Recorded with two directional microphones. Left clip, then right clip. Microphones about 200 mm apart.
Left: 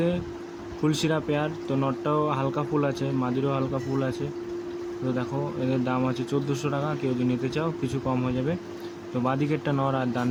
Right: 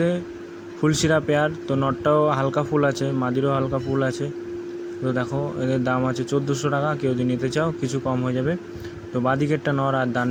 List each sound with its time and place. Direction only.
0.8 s speech: 15° right (ahead or behind)